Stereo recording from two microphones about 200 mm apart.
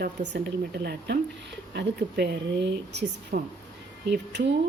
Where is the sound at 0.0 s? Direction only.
55° right (ahead or behind).